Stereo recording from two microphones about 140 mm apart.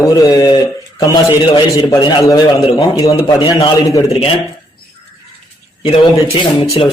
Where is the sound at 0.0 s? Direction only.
25° left (ahead or behind).